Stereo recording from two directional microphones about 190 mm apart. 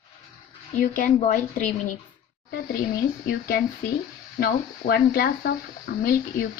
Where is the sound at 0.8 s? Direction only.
45° left (ahead or behind).